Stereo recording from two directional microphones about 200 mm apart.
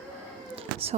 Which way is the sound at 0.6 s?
30° right (ahead or behind).